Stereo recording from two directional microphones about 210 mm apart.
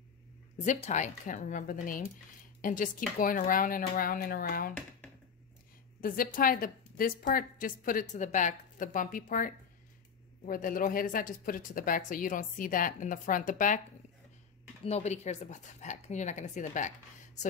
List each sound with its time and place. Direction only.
0.7 s a woman's voice: 35° left (ahead or behind)
5.9 s a woman's voice: 40° left (ahead or behind)
14.9 s a woman's voice: 30° left (ahead or behind)